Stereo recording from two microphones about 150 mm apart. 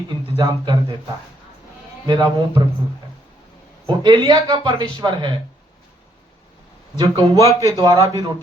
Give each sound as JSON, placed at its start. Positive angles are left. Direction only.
{"t": 0.1, "sound": "speech", "side_deg": -30}
{"t": 2.0, "sound": "speech", "side_deg": -25}
{"t": 3.8, "sound": "speech", "side_deg": -30}
{"t": 6.9, "sound": "speech", "side_deg": -25}